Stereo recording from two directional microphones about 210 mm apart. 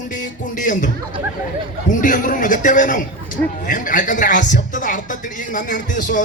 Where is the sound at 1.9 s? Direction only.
40° left (ahead or behind).